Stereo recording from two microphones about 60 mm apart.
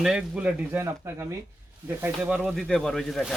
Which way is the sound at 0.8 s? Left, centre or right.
Right.